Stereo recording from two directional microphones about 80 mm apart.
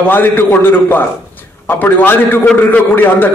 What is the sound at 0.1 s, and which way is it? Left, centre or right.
A man's voice, left.